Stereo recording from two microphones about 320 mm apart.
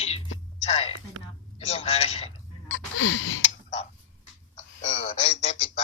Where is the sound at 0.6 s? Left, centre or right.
Centre.